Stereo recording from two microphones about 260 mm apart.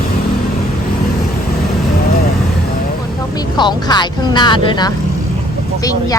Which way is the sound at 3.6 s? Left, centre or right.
Centre.